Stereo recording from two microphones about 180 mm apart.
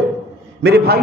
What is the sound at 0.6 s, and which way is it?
Speech, 60° right (ahead or behind).